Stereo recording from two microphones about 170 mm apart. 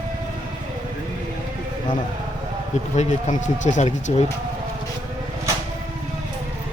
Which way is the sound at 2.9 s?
40° left (ahead or behind).